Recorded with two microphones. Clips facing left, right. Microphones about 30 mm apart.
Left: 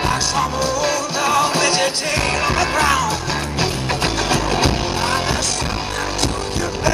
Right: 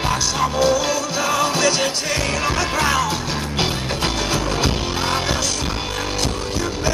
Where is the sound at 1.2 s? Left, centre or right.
Left.